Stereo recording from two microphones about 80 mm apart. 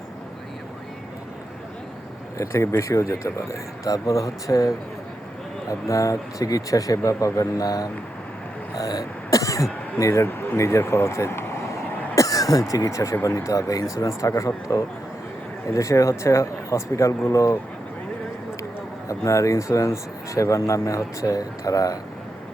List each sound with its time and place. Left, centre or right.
2.4 s speech: left
8.7 s throat clearing: left
10.0 s speech: left
12.1 s a sound: left
12.7 s speech: left
19.0 s speech: left